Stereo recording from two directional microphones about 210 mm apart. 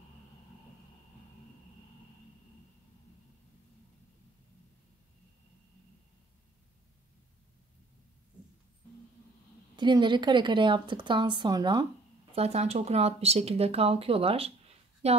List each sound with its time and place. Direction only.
9.8 s a woman's voice: 20° right (ahead or behind)